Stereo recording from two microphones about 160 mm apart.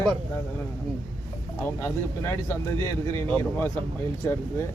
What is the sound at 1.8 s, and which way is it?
Speech, 15° left (ahead or behind).